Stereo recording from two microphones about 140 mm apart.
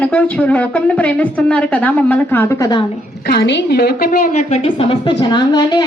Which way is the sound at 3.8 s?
90° left.